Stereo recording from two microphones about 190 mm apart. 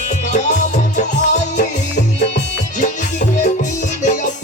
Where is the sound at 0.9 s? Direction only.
40° left (ahead or behind).